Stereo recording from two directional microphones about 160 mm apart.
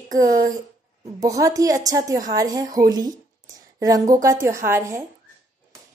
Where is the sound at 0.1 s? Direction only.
25° right (ahead or behind).